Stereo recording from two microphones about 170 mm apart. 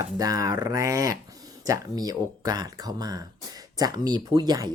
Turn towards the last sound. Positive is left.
turn(degrees=-25)  # may be behind; listen again after turning